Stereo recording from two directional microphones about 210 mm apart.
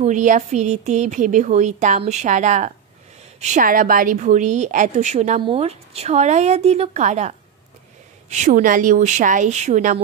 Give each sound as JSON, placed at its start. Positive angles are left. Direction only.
{"t": 0.0, "sound": "a woman's voice", "side_deg": -35}